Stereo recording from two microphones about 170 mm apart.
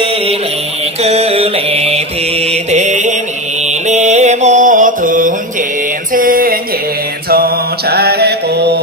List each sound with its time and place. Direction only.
1.0 s mantra: 40° right (ahead or behind)
6.1 s music: 55° right (ahead or behind)
7.2 s mantra: 65° right (ahead or behind)